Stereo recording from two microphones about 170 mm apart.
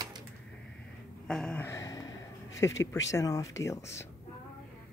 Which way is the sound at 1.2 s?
5° left (ahead or behind).